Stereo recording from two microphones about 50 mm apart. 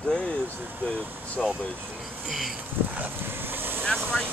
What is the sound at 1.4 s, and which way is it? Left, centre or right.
Speech, centre.